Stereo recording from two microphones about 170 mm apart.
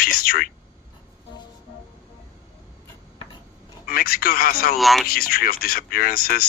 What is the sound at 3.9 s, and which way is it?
Speech, 60° left (ahead or behind).